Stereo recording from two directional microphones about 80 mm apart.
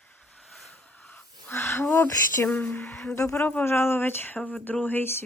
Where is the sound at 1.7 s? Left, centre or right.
Left.